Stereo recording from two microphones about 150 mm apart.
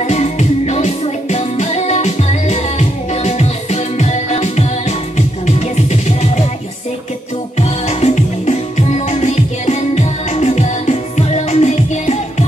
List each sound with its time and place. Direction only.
0.0 s music: 50° left (ahead or behind)
7.5 s music: 45° left (ahead or behind)